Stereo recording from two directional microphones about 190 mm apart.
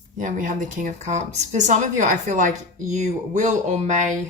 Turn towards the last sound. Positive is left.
turn(degrees=-40)  # may be behind; listen again after turning